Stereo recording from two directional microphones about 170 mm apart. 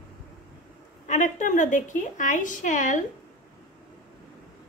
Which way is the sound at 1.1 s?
45° left (ahead or behind).